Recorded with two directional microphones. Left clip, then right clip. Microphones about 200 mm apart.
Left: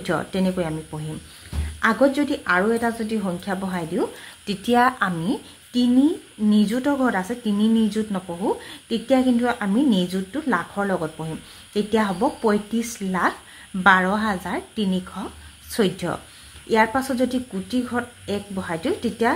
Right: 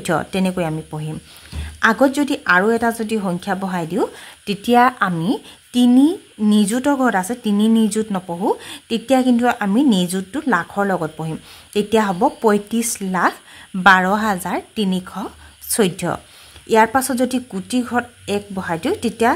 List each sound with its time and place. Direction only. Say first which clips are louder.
0.0 s a woman's voice: right 4 dB; 40° right (ahead or behind)